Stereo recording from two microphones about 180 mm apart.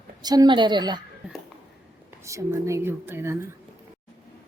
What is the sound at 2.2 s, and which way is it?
Speech, 15° right (ahead or behind).